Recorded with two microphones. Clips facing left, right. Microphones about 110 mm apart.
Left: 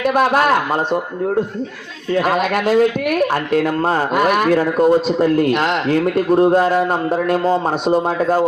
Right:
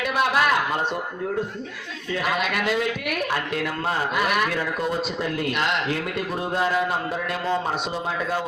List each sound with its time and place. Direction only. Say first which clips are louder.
0.0 s speech: left 7 dB; 45° left (ahead or behind)
2.1 s speech: left 8 dB; 45° left (ahead or behind)